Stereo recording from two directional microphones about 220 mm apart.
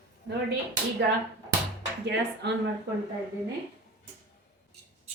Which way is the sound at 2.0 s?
50° right (ahead or behind).